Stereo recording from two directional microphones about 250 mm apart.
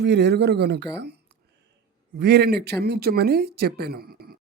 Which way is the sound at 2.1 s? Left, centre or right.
Right.